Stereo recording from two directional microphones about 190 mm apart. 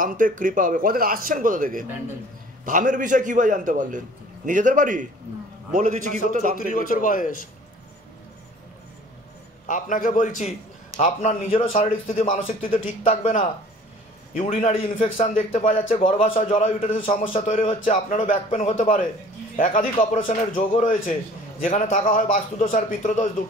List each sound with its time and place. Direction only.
0.0 s a man's voice: 45° right (ahead or behind)
6.6 s a man's voice: 45° left (ahead or behind)
9.7 s a man's voice: 45° left (ahead or behind)
14.4 s a man's voice: 30° left (ahead or behind)